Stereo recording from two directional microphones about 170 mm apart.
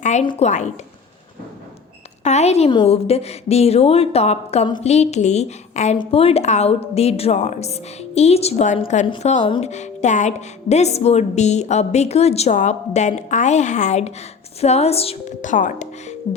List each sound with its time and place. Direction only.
0.0 s a sound: 45° left (ahead or behind)
0.3 s a woman's voice: 40° left (ahead or behind)
2.2 s a woman's voice: 40° left (ahead or behind)